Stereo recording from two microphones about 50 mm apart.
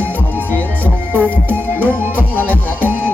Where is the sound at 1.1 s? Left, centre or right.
Right.